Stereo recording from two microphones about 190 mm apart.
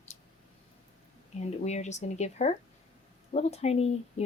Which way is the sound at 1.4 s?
35° left (ahead or behind).